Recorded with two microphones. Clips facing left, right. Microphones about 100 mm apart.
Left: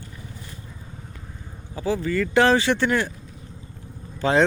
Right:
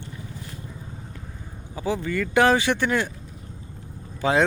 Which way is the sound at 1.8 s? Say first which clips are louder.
Left 2 dB; 20° right (ahead or behind).